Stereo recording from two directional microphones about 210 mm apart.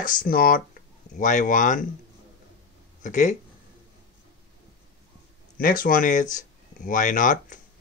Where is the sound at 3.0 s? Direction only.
35° left (ahead or behind).